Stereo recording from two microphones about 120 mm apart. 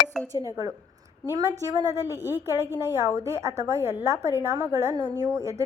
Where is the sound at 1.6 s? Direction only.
30° right (ahead or behind).